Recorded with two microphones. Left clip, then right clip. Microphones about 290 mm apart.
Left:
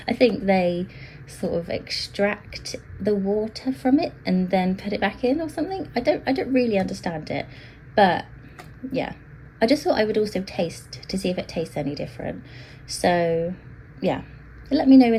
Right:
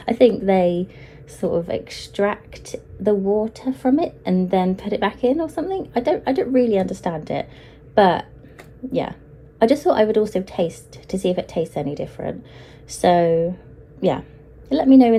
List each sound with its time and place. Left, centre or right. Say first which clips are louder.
0.0 s a woman's voice: right 5 dB; right
14.7 s a woman's voice: right 2 dB; right